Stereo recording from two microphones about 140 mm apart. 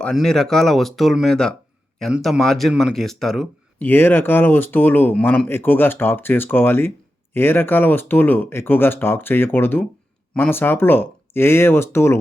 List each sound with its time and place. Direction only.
0.0 s speech: 5° left (ahead or behind)
3.8 s speech: 15° left (ahead or behind)